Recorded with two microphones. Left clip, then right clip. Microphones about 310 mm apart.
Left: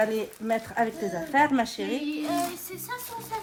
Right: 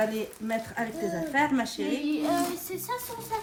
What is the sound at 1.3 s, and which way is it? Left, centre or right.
Speech, left.